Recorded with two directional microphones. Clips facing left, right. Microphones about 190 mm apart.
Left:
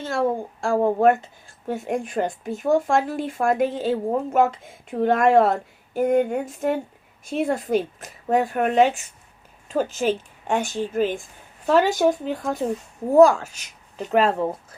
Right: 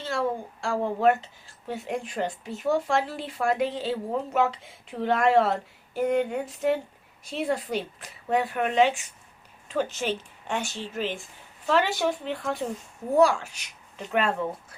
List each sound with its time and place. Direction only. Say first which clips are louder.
0.0 s a woman's voice: left 5 dB; 50° left (ahead or behind)